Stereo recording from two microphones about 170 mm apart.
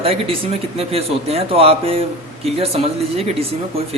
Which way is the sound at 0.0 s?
35° right (ahead or behind).